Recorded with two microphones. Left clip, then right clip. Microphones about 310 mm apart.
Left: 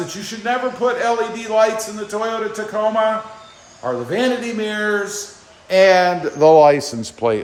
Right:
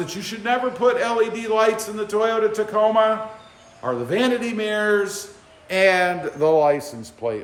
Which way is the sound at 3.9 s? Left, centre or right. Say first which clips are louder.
Left 2 dB; centre.